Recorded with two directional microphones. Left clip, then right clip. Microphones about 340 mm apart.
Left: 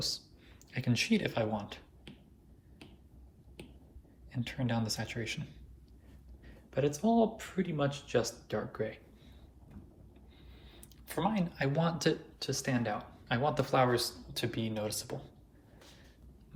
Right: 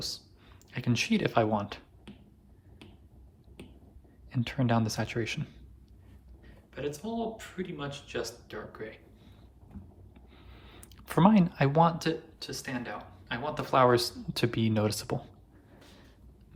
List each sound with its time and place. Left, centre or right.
0.7 s speech: centre
4.3 s speech: centre
6.4 s speech: centre
10.3 s speech: centre